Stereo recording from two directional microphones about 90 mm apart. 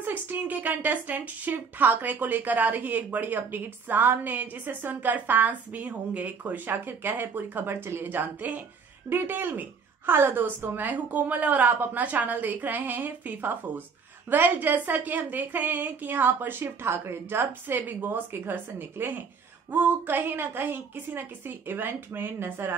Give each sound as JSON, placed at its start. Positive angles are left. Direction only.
{"t": 0.0, "sound": "a woman's voice", "side_deg": -20}